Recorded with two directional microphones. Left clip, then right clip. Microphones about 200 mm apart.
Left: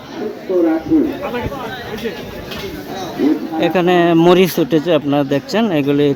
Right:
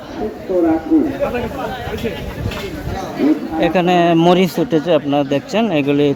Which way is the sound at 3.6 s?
5° left (ahead or behind).